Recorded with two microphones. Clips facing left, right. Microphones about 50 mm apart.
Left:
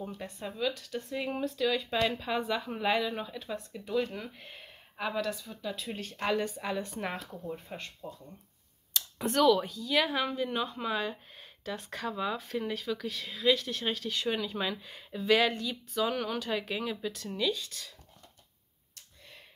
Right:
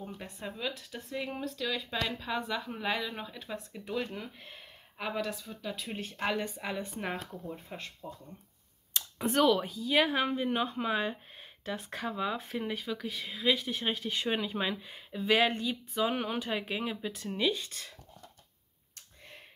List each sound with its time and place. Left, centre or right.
0.2 s speech: centre
1.1 s speech: centre
9.2 s speech: centre
15.4 s speech: right